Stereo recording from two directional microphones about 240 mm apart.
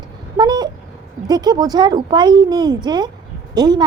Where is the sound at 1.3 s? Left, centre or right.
Centre.